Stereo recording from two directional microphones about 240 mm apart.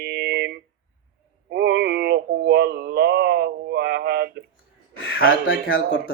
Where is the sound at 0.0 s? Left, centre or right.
Right.